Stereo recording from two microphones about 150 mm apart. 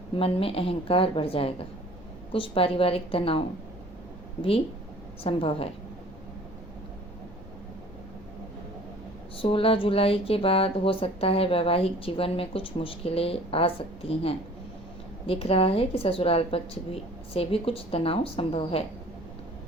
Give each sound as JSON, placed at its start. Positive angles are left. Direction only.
{"t": 0.2, "sound": "speech", "side_deg": 40}
{"t": 5.2, "sound": "speech", "side_deg": 35}
{"t": 9.4, "sound": "speech", "side_deg": 35}